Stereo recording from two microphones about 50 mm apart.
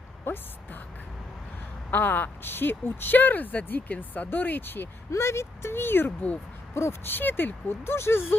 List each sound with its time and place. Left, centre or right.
0.3 s speech: left
1.9 s a woman's voice: left
5.1 s speech: left